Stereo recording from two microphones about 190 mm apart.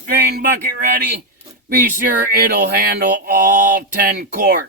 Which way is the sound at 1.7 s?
45° right (ahead or behind).